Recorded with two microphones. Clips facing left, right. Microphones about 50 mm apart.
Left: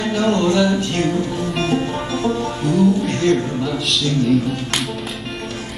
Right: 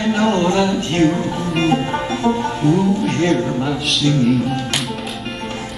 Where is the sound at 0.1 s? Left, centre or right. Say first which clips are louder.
Right 1 dB; right.